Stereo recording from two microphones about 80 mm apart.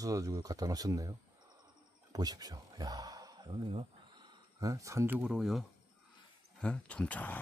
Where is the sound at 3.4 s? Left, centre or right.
Right.